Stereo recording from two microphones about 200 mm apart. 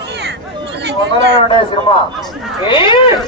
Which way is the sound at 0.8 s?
55° right (ahead or behind).